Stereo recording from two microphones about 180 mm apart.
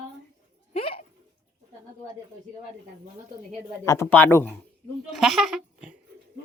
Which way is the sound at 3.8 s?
15° left (ahead or behind).